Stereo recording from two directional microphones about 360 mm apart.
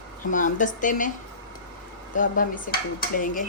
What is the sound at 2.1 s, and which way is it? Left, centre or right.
Speech, left.